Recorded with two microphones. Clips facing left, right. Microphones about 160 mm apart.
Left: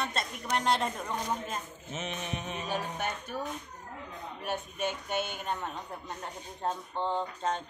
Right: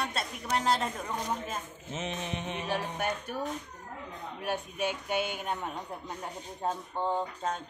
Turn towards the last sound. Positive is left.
turn(degrees=-5)  # may be behind; listen again after turning